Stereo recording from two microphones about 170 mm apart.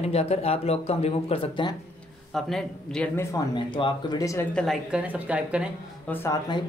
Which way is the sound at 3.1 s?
20° left (ahead or behind).